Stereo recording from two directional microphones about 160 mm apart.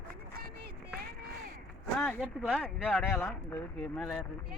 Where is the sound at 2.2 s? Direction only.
5° right (ahead or behind).